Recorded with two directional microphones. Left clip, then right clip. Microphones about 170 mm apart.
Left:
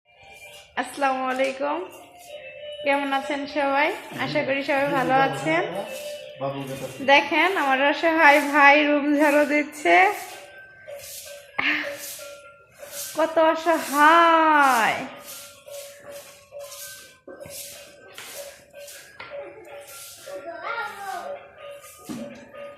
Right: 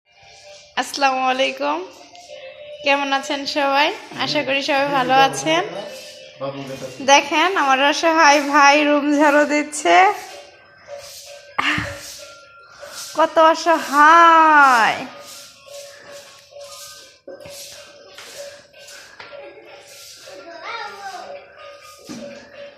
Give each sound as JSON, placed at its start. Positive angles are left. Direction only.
{"t": 0.9, "sound": "a woman's voice", "side_deg": -25}
{"t": 2.8, "sound": "a woman's voice", "side_deg": -25}
{"t": 7.0, "sound": "a child's voice", "side_deg": -20}
{"t": 11.5, "sound": "music", "side_deg": -10}
{"t": 13.1, "sound": "a child's voice", "side_deg": -10}